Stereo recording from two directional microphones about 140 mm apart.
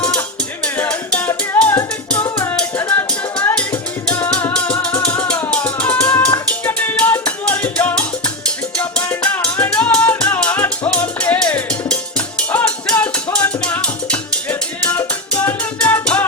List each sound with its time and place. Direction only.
0.0 s music: 5° left (ahead or behind)
2.0 s music: 5° left (ahead or behind)
2.4 s music: 15° left (ahead or behind)